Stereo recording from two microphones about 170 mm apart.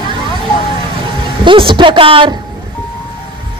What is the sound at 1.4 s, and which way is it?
Speech, 30° right (ahead or behind).